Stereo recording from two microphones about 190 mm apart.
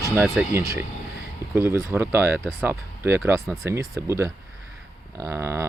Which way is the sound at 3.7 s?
15° right (ahead or behind).